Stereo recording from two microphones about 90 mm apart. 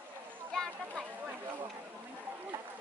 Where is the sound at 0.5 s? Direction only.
5° left (ahead or behind).